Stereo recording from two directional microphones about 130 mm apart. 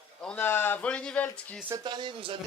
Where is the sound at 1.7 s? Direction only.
35° right (ahead or behind).